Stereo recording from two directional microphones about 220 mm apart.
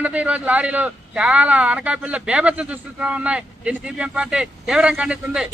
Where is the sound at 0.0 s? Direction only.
5° right (ahead or behind).